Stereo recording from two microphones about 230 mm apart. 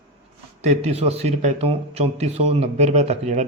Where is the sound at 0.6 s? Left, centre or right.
Right.